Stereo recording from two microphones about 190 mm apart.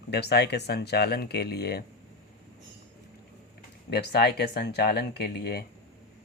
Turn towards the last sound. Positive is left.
turn(degrees=60)  # may be behind; listen again after turning